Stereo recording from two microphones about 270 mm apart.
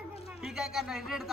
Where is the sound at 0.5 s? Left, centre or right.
Centre.